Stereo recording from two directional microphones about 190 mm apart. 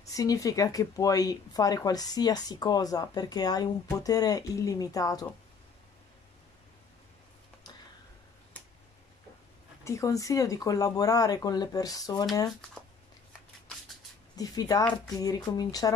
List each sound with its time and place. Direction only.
0.1 s speech: 20° left (ahead or behind)
9.8 s speech: 15° left (ahead or behind)
14.3 s speech: 20° left (ahead or behind)